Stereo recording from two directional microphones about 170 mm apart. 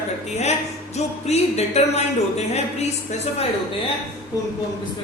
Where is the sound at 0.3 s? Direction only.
40° left (ahead or behind).